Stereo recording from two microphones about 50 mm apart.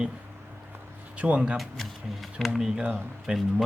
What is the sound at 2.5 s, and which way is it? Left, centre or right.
Speech, centre.